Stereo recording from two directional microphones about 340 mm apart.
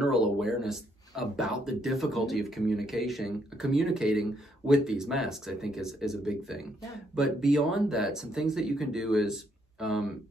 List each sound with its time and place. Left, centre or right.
0.0 s speech: centre